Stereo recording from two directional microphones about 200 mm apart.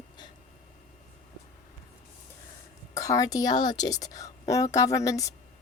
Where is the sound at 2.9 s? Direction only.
15° left (ahead or behind).